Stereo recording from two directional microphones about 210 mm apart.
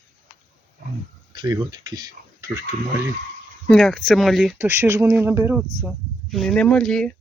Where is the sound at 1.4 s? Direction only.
20° right (ahead or behind).